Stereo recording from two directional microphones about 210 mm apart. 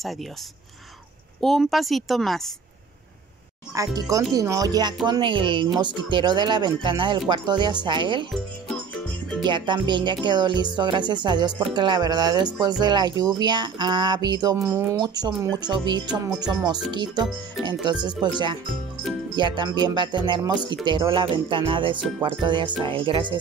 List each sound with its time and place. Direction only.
0.0 s a woman's voice: centre (ahead or behind)
1.4 s a woman's voice: centre (ahead or behind)
3.7 s speech: 15° right (ahead or behind)
9.4 s speech: 20° right (ahead or behind)